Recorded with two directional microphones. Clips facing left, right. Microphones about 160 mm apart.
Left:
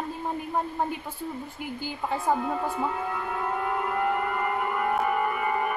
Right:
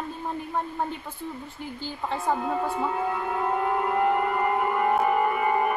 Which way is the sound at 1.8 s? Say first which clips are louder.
Left 1 dB; 10° left (ahead or behind).